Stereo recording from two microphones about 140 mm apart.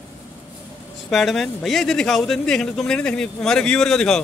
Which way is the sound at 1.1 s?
Centre (ahead or behind).